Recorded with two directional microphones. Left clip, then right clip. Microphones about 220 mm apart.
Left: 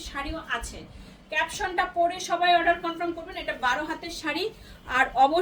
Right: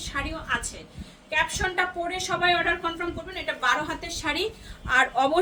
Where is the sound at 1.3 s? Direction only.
20° right (ahead or behind).